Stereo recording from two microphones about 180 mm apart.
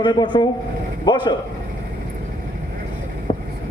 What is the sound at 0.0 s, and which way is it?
A man's voice, 25° left (ahead or behind).